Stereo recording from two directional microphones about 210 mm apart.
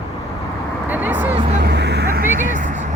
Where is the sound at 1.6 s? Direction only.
55° right (ahead or behind).